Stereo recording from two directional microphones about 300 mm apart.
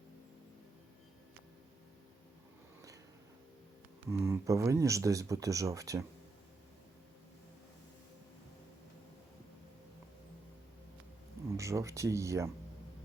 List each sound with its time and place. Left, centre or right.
4.1 s speech: centre
11.4 s speech: centre